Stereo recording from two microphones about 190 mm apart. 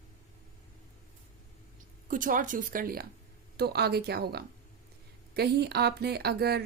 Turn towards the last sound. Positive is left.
turn(degrees=-55)  # may be behind; listen again after turning